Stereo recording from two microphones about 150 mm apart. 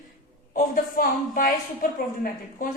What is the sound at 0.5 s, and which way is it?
A woman's voice, 70° left (ahead or behind).